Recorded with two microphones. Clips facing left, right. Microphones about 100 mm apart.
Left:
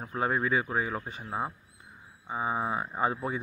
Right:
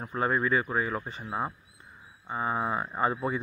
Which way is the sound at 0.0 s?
5° left (ahead or behind).